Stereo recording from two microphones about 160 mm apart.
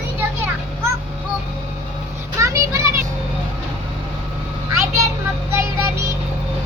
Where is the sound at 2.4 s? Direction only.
20° right (ahead or behind).